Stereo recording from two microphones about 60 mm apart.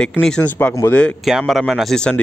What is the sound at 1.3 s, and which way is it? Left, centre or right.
Speech, centre.